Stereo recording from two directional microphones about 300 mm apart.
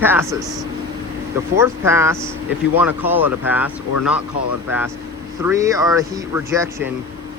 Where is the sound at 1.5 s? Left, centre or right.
Centre.